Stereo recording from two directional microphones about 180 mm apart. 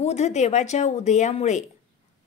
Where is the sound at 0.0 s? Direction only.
40° left (ahead or behind).